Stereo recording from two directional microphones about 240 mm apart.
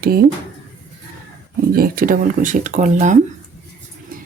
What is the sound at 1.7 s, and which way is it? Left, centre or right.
Speech, right.